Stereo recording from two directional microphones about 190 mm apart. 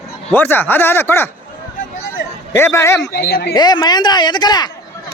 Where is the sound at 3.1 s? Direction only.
55° left (ahead or behind).